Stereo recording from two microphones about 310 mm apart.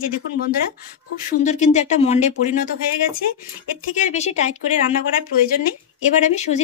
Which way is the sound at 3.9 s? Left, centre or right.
Left.